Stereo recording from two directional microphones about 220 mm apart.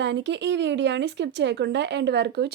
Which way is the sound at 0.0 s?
55° right (ahead or behind).